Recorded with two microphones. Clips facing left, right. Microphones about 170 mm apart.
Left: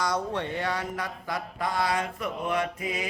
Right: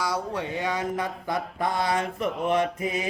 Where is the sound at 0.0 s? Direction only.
10° right (ahead or behind).